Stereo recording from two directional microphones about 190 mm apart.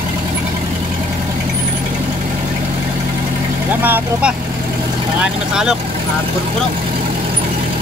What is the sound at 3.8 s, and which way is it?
Speech, 10° right (ahead or behind).